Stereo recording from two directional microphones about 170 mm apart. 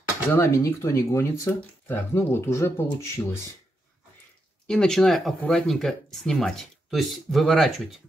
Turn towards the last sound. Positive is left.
turn(degrees=0)  # may be behind; listen again after turning